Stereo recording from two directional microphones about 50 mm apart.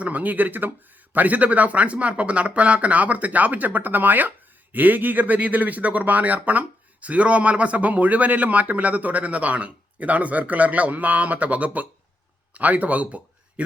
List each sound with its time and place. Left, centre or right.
0.0 s a man's voice: right